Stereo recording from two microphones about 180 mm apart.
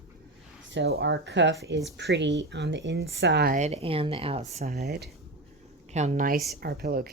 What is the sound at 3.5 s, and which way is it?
Speech, 40° right (ahead or behind).